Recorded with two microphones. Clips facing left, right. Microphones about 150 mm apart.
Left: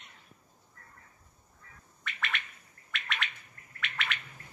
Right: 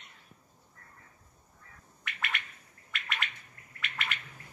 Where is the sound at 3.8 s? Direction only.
5° right (ahead or behind).